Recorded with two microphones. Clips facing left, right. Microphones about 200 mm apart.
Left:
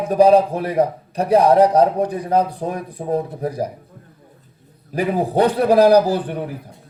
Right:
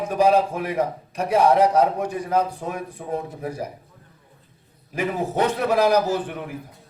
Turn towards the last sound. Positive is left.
turn(degrees=35)  # may be behind; listen again after turning